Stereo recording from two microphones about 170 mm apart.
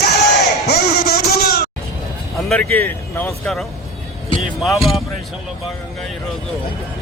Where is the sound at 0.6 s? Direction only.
70° left (ahead or behind).